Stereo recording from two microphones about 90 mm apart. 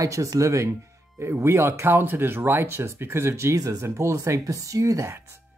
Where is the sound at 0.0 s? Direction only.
40° right (ahead or behind).